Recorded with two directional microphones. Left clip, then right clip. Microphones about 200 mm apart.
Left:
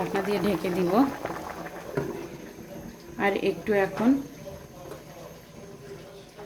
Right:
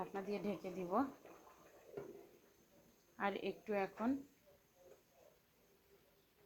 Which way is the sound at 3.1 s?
15° right (ahead or behind).